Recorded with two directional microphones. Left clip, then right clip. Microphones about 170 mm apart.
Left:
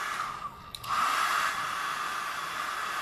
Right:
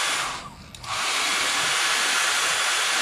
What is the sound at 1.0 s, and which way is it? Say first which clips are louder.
Hair dryer: right 3 dB; 25° right (ahead or behind).